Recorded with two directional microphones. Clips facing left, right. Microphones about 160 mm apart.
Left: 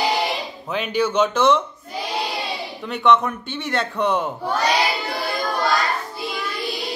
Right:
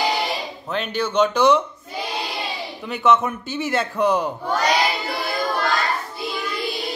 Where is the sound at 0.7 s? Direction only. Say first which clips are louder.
Left 2 dB; 5° left (ahead or behind).